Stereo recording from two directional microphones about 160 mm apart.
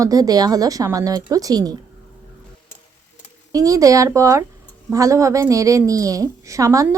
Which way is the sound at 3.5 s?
20° right (ahead or behind).